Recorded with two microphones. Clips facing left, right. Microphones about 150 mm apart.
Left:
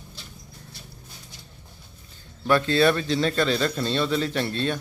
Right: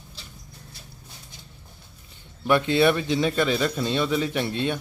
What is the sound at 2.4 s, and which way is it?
Speech, 20° right (ahead or behind).